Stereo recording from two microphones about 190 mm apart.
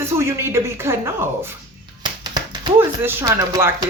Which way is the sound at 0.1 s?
15° right (ahead or behind).